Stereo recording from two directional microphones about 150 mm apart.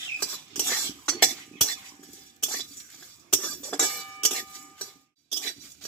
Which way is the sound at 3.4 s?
10° left (ahead or behind).